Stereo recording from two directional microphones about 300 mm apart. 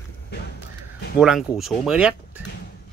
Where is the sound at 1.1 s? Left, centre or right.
Centre.